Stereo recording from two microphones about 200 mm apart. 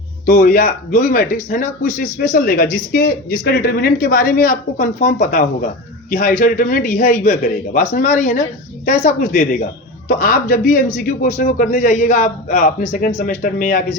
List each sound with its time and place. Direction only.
0.3 s a man's voice: 40° left (ahead or behind)